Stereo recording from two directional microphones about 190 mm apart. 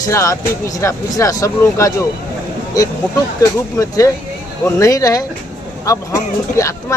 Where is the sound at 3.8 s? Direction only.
15° left (ahead or behind).